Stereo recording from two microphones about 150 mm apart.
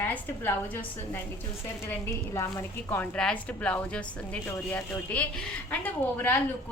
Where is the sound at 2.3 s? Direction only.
20° left (ahead or behind).